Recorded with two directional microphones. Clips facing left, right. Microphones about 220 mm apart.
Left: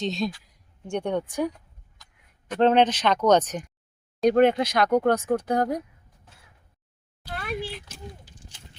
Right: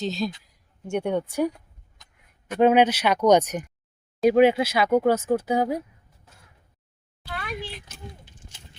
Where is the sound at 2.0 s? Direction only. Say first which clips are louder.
Even; 20° right (ahead or behind).